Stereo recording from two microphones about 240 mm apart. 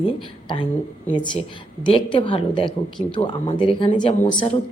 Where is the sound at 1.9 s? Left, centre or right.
Left.